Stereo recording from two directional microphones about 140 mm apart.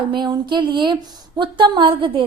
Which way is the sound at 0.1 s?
35° right (ahead or behind).